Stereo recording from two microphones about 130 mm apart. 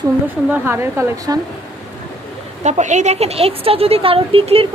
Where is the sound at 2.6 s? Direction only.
65° right (ahead or behind).